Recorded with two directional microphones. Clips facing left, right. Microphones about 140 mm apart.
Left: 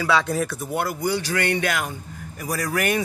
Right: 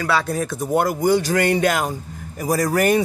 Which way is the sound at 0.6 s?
40° right (ahead or behind).